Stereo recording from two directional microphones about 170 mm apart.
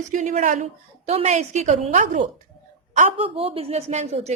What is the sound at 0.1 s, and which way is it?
A woman's voice, 45° right (ahead or behind).